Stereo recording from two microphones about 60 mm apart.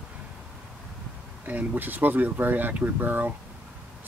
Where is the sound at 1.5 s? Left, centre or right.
Right.